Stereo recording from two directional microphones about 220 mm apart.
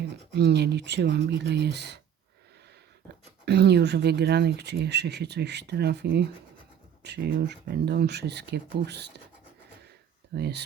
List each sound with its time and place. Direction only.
0.3 s speech: 50° right (ahead or behind)
3.4 s speech: 50° right (ahead or behind)
10.3 s speech: 50° right (ahead or behind)